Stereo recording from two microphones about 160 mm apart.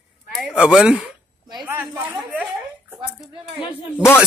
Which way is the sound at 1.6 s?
10° right (ahead or behind).